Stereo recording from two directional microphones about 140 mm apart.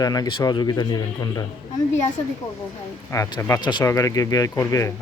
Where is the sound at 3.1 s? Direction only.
25° left (ahead or behind).